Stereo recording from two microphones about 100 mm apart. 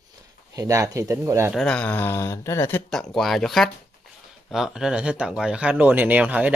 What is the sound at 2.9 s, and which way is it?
Speech, 5° left (ahead or behind).